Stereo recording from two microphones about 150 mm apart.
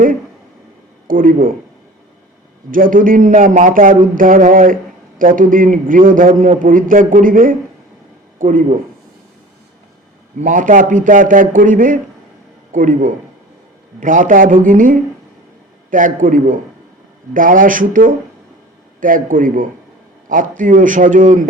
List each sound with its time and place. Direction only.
1.0 s speech: 65° right (ahead or behind)
2.6 s speech: 65° right (ahead or behind)
10.4 s a man's voice: 60° right (ahead or behind)